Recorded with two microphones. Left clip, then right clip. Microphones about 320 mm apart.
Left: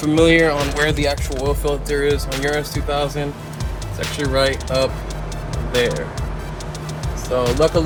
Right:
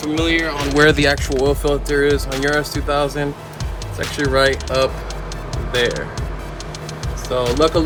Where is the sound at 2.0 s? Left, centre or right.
Right.